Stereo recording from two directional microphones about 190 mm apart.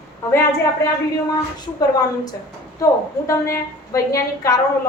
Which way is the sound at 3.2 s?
15° left (ahead or behind).